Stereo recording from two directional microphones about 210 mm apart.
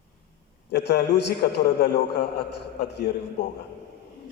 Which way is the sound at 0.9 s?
50° left (ahead or behind).